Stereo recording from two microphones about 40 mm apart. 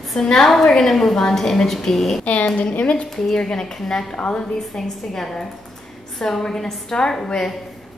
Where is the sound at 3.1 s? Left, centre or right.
Centre.